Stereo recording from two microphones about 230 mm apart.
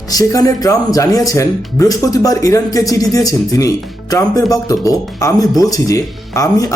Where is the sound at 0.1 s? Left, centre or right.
Centre.